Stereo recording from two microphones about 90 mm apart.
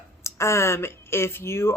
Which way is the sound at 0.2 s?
30° left (ahead or behind).